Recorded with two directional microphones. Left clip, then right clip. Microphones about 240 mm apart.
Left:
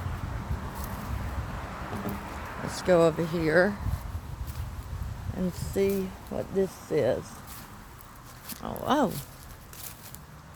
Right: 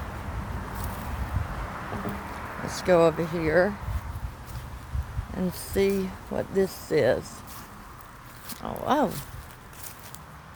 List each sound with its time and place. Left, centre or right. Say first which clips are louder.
1.9 s a sound: right 2 dB; left
2.6 s speech: right 2 dB; centre
5.5 s speech: right 2 dB; centre
8.4 s speech: right 2 dB; centre